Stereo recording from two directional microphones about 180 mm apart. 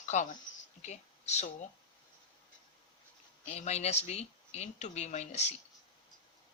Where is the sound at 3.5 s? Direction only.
35° left (ahead or behind).